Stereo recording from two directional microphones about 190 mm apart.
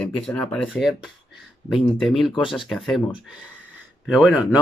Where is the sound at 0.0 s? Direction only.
10° left (ahead or behind).